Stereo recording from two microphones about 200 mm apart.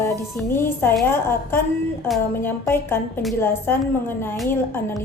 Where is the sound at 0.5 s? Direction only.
10° left (ahead or behind).